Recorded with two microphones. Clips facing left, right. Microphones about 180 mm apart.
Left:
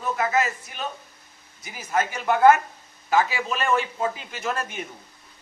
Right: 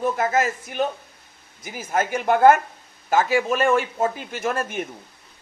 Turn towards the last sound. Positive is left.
turn(degrees=-50)  # may be behind; listen again after turning